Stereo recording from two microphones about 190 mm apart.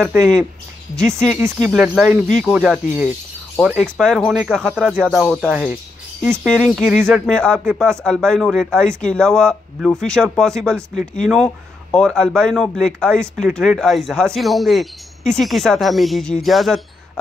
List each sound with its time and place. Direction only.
0.0 s speech: centre (ahead or behind)